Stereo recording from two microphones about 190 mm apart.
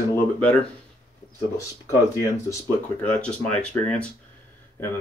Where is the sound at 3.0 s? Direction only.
5° left (ahead or behind).